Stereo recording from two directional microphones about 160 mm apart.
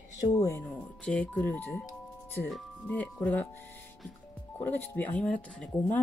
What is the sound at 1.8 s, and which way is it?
Music, 15° left (ahead or behind).